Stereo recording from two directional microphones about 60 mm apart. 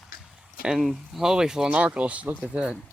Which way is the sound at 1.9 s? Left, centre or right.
Right.